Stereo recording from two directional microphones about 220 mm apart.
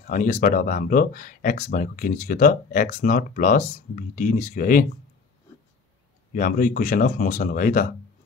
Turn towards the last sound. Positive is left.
turn(degrees=40)  # may be behind; listen again after turning